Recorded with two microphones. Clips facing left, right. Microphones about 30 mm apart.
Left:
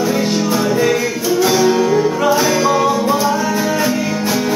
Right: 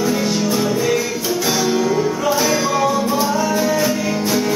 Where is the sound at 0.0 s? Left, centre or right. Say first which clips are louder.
Left 2 dB; centre.